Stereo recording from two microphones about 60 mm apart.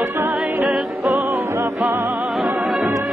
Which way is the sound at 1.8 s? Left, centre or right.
Right.